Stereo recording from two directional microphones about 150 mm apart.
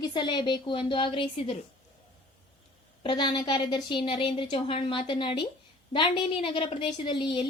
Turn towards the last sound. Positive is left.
turn(degrees=30)  # may be behind; listen again after turning